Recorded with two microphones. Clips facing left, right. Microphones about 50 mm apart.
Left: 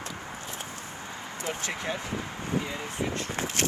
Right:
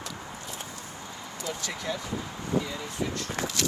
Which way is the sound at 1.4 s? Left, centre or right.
Left.